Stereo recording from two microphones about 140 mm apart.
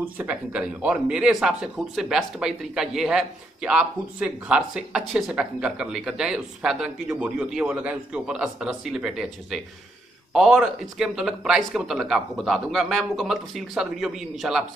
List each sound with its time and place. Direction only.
0.0 s a man's voice: 10° right (ahead or behind)